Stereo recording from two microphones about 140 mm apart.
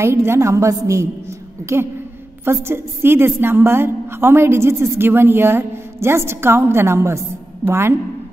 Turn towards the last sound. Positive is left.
turn(degrees=-15)  # may be behind; listen again after turning